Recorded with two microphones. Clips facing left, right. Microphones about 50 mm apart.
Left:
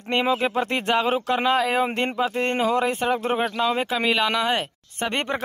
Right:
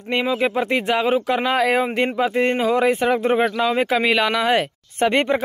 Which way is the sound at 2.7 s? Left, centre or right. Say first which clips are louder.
Right 4 dB; right.